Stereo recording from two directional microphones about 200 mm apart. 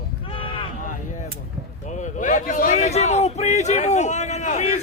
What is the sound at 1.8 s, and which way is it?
Speech, 35° left (ahead or behind).